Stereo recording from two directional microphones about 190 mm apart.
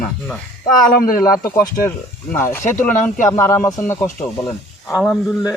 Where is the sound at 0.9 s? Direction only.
50° left (ahead or behind).